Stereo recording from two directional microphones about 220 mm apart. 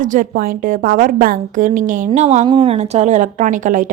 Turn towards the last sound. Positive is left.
turn(degrees=-35)  # may be behind; listen again after turning